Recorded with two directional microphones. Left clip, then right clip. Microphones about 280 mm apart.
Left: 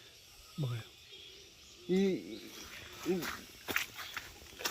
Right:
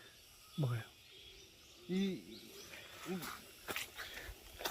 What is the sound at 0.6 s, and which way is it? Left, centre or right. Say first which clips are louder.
Speech: even; centre.